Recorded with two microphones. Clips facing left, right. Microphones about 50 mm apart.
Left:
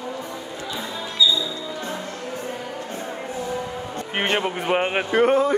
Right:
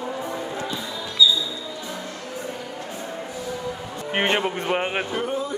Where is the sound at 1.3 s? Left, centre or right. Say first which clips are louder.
Left 1 dB; left.